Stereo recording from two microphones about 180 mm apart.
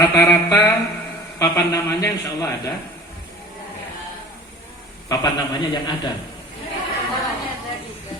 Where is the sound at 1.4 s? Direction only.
20° left (ahead or behind).